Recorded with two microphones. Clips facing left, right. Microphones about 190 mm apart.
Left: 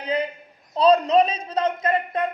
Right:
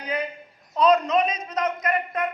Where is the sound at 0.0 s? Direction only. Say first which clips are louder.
Left 4 dB; 30° left (ahead or behind).